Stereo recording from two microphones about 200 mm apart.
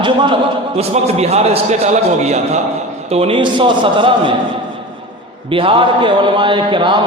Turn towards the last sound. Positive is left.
turn(degrees=-25)  # may be behind; listen again after turning